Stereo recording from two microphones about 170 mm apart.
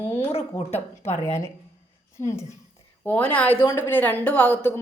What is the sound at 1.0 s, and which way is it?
Speech, 40° left (ahead or behind).